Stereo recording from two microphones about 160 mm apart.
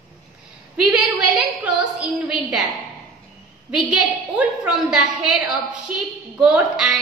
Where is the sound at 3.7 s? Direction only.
5° right (ahead or behind).